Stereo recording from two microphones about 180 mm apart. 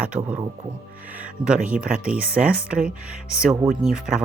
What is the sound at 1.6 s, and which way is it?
Speech, 5° right (ahead or behind).